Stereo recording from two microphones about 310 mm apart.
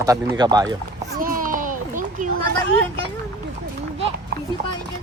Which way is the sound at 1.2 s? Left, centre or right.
Right.